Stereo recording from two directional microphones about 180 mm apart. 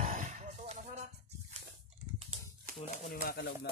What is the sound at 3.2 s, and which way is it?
Speech, 60° left (ahead or behind).